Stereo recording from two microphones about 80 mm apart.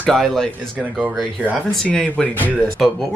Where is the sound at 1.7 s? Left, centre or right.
Centre.